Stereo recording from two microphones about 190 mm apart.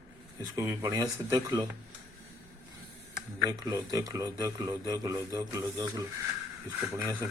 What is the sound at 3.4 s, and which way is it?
Speech, 20° right (ahead or behind).